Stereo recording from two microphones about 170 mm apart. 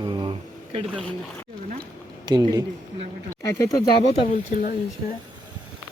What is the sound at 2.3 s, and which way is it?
Speech, 25° right (ahead or behind).